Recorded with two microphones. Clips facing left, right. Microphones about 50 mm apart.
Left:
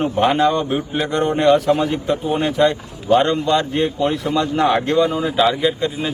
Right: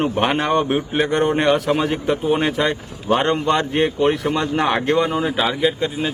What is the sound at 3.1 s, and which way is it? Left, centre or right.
A man's voice, right.